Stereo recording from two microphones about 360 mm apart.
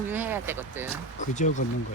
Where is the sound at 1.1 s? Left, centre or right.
Centre.